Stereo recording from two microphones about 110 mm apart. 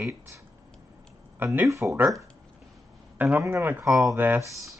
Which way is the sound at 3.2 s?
15° right (ahead or behind).